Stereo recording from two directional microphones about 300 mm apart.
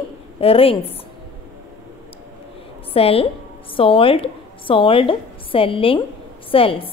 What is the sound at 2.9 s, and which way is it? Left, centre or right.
A woman's voice, centre.